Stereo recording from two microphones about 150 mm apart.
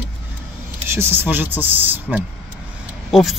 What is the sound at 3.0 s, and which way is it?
Speech, centre (ahead or behind).